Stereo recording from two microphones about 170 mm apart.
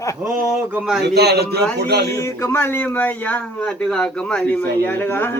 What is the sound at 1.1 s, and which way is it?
Speech, 75° right (ahead or behind).